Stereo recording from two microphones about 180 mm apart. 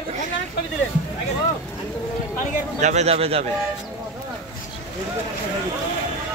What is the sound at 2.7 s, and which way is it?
Speech, 40° right (ahead or behind).